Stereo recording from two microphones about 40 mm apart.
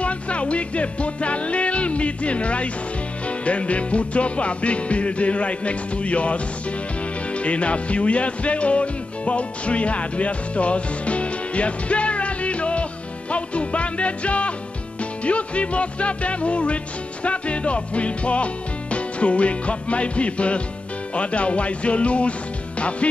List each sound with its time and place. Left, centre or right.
0.0 s music: left